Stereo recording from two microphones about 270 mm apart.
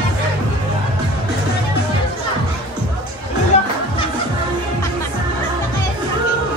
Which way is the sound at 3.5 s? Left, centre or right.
Left.